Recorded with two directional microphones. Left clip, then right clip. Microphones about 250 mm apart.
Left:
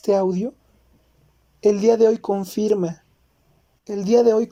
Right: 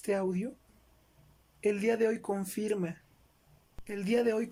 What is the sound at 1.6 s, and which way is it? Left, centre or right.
Speech, centre.